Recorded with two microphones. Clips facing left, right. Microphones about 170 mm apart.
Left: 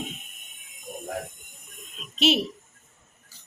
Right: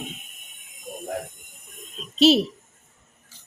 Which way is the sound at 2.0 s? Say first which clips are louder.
Right 6 dB; 35° right (ahead or behind).